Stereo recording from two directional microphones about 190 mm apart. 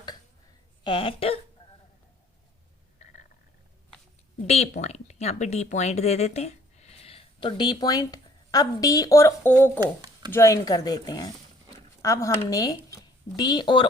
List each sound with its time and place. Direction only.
0.9 s speech: 30° left (ahead or behind)
4.4 s speech: 35° left (ahead or behind); by 9.8 s 10° left (ahead or behind)
9.8 s speech: 20° right (ahead or behind)
10.3 s speech: 15° left (ahead or behind)